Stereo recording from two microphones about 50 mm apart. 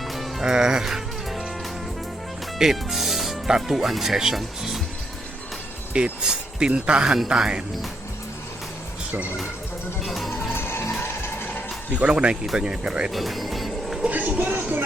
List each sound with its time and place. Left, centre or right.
0.1 s music: centre
0.4 s music: centre
2.6 s speech: centre
5.9 s speech: centre
10.1 s music: centre
10.5 s music: left
11.9 s speech: right
13.1 s music: centre
14.0 s vehicle: right
14.3 s music: right